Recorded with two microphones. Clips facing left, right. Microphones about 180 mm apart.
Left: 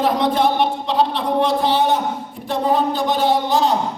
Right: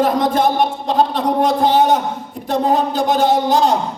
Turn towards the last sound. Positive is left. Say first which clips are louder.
# right 3 dB
turn(degrees=-45)  # may be behind; listen again after turning